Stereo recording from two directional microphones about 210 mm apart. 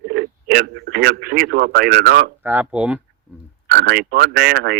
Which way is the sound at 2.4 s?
10° right (ahead or behind).